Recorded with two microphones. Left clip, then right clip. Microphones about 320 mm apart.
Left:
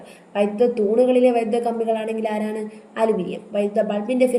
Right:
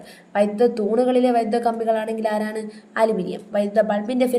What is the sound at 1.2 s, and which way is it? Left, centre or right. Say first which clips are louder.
Speech: left 1 dB; right.